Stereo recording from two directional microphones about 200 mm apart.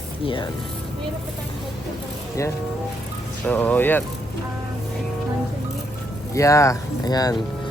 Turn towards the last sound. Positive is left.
turn(degrees=20)  # may be behind; listen again after turning